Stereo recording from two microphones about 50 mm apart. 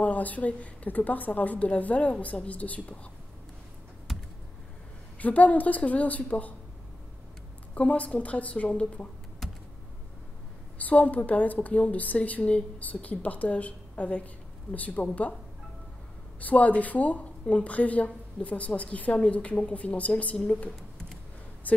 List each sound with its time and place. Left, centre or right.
0.0 s a woman's voice: left
4.1 s a sound: centre
5.2 s a woman's voice: left
7.7 s a woman's voice: left
10.8 s a woman's voice: left
16.3 s a woman's voice: left